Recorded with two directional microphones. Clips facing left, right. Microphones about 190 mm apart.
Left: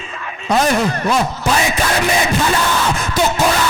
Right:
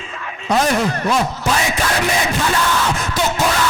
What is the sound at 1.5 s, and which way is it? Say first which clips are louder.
Yell: left 3 dB; 15° left (ahead or behind).